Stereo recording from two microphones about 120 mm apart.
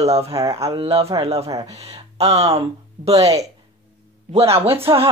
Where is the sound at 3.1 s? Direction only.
30° right (ahead or behind).